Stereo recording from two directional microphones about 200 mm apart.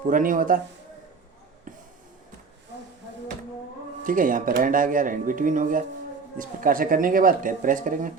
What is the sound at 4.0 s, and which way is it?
Speech, 45° right (ahead or behind).